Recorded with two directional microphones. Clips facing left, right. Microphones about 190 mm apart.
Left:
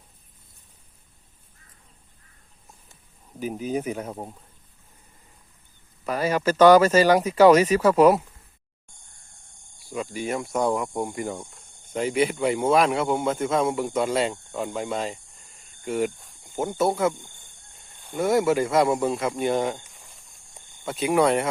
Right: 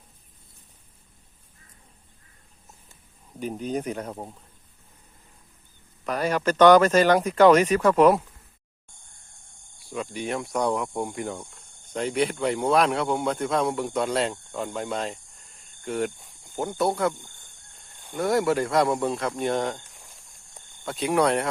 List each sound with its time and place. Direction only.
3.4 s speech: 5° left (ahead or behind)
6.1 s speech: 5° left (ahead or behind)
9.8 s speech: centre (ahead or behind)